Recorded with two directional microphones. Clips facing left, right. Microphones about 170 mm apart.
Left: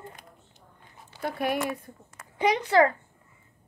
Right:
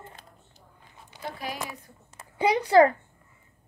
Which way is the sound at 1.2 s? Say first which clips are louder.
Left 7 dB; 60° left (ahead or behind).